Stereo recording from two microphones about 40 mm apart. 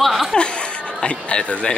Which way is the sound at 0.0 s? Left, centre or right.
Centre.